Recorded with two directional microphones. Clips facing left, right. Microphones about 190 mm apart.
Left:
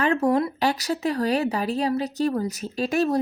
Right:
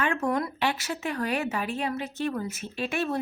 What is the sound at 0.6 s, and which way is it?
A woman's voice, 40° left (ahead or behind).